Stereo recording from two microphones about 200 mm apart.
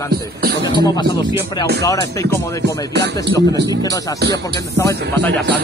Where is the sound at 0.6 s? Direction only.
20° left (ahead or behind).